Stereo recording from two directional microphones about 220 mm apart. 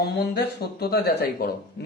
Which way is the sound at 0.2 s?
45° left (ahead or behind).